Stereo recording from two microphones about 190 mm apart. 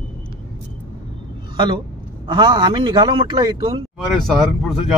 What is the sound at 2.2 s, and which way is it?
A man's voice, 25° right (ahead or behind).